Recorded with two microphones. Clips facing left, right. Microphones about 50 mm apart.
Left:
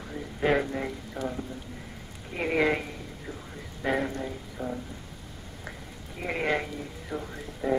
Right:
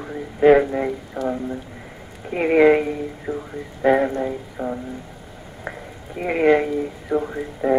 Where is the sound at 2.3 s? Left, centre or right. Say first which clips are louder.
Right 11 dB; right.